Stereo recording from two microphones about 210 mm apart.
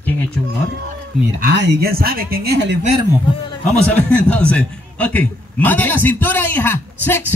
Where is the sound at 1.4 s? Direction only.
55° right (ahead or behind).